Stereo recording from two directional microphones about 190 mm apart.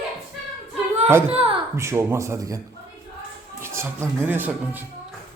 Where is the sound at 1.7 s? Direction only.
15° right (ahead or behind).